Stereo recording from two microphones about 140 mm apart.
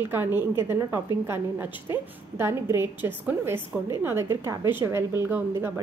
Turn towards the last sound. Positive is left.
turn(degrees=-15)  # may be behind; listen again after turning